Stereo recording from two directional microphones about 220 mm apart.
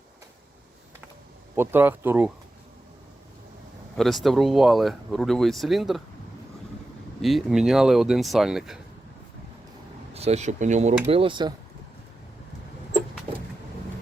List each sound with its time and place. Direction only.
1.5 s speech: 10° right (ahead or behind)
3.9 s speech: centre (ahead or behind)
7.2 s speech: centre (ahead or behind)
10.2 s speech: 30° right (ahead or behind)